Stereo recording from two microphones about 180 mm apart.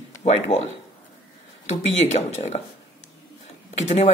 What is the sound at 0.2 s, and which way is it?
Speech, 35° left (ahead or behind).